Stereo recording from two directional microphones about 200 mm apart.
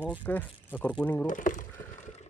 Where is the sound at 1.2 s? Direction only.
40° left (ahead or behind).